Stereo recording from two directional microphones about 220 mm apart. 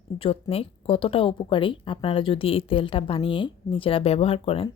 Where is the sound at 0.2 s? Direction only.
25° left (ahead or behind).